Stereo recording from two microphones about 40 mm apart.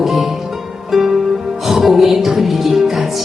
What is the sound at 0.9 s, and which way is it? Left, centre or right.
Music, centre.